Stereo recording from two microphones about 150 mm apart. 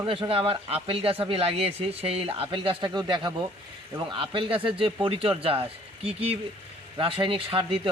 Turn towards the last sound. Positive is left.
turn(degrees=-35)  # may be behind; listen again after turning